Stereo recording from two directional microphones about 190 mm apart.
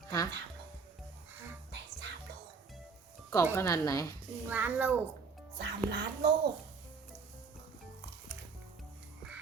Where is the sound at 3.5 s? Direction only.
15° left (ahead or behind).